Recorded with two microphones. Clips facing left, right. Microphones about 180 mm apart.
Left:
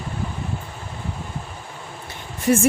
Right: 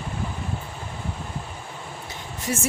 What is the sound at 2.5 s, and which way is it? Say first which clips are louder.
Speech: left 10 dB; 55° left (ahead or behind).